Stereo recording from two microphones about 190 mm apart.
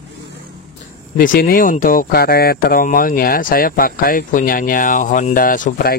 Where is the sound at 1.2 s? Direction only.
50° left (ahead or behind).